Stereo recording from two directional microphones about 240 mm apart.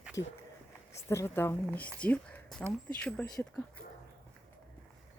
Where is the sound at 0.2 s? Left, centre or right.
Centre.